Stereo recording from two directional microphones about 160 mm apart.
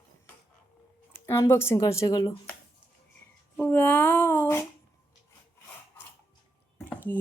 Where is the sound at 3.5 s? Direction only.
10° left (ahead or behind).